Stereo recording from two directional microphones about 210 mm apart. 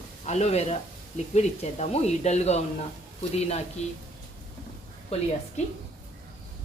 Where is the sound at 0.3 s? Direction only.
30° left (ahead or behind).